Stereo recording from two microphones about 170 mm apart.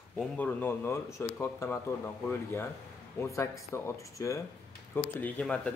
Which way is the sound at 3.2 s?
15° left (ahead or behind).